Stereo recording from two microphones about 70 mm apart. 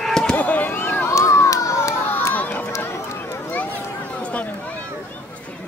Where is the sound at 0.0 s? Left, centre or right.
Centre.